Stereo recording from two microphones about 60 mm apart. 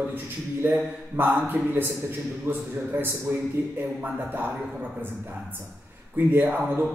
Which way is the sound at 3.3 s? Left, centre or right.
Right.